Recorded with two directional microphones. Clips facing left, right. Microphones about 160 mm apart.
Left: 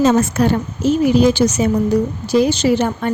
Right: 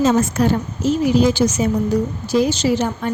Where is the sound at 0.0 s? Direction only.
70° left (ahead or behind).